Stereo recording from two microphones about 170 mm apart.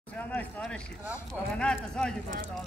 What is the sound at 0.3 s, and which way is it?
Speech, 5° left (ahead or behind).